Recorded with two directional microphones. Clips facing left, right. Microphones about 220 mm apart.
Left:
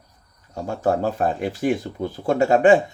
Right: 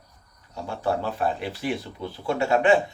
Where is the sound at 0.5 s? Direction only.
45° left (ahead or behind).